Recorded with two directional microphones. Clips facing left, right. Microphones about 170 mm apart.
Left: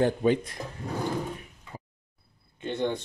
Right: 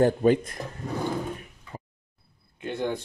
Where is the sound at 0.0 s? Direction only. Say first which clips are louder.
Right 3 dB; 45° right (ahead or behind).